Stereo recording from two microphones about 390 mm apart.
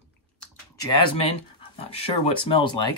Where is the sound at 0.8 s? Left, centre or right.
Left.